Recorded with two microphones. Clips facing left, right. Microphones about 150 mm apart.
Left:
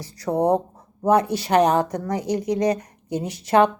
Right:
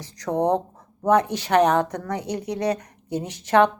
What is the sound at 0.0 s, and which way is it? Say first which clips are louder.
A woman's voice: left 2 dB; 10° left (ahead or behind).